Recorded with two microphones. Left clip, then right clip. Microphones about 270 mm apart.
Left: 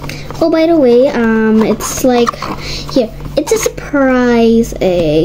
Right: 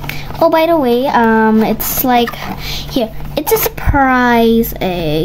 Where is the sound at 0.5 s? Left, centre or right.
Centre.